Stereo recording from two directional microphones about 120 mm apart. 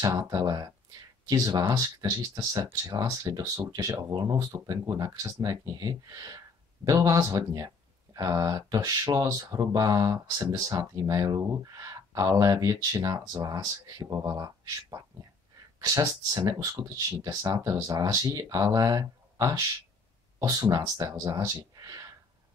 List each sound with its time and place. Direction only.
0.0 s speech: 30° right (ahead or behind)